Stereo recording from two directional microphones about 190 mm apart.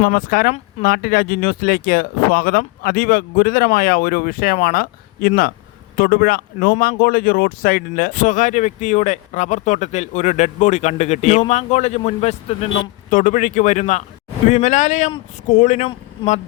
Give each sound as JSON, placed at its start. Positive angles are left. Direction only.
{"t": 0.0, "sound": "speech", "side_deg": 50}